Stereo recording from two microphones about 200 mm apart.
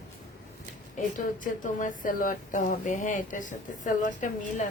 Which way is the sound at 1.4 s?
40° left (ahead or behind).